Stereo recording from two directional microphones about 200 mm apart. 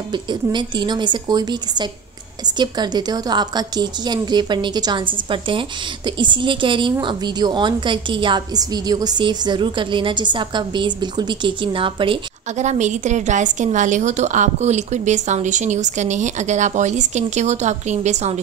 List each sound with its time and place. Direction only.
0.1 s a woman's voice: 20° right (ahead or behind)